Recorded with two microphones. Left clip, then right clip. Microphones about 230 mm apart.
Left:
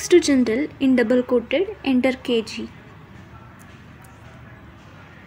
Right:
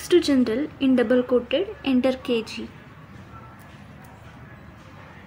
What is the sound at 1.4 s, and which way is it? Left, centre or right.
A woman's voice, left.